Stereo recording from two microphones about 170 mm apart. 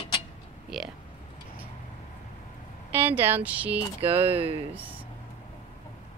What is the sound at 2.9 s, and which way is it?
Speech, 10° right (ahead or behind).